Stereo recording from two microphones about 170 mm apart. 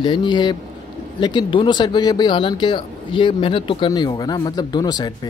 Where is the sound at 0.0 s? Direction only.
25° left (ahead or behind).